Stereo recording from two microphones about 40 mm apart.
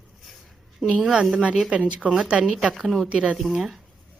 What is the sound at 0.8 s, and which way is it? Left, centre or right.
Speech, centre.